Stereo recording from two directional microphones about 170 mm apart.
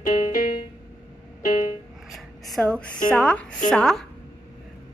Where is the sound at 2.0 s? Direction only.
Centre (ahead or behind).